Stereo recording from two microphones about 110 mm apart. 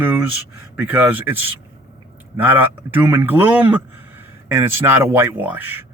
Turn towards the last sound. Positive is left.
turn(degrees=-15)  # may be behind; listen again after turning